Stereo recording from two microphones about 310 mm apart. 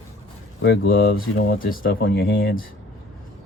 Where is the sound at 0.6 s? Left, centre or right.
Left.